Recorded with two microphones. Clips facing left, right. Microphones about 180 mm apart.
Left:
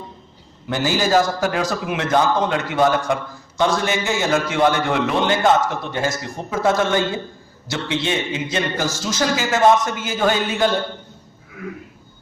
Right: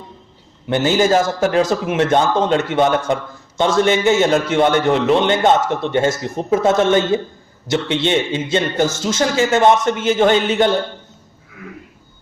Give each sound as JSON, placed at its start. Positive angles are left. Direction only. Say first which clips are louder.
{"t": 0.7, "sound": "a man's voice", "louder": "right 4 dB", "side_deg": -25}